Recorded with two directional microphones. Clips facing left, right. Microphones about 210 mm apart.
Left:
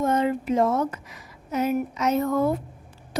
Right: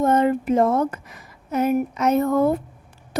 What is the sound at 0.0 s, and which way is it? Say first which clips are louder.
A woman's voice: right 4 dB; 55° right (ahead or behind).